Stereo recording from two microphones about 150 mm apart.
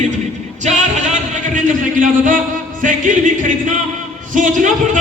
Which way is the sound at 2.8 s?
60° right (ahead or behind).